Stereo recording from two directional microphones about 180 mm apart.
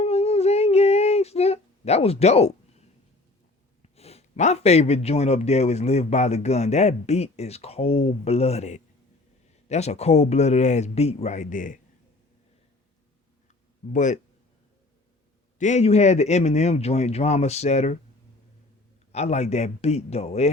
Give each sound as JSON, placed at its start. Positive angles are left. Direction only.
{"t": 0.0, "sound": "a sound", "side_deg": 35}
{"t": 3.8, "sound": "a man's voice", "side_deg": 35}
{"t": 13.9, "sound": "a man's voice", "side_deg": 45}
{"t": 15.5, "sound": "a man's voice", "side_deg": 40}
{"t": 19.1, "sound": "a man's voice", "side_deg": 35}